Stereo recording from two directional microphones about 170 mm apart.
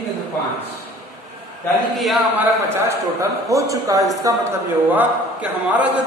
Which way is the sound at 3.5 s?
20° right (ahead or behind).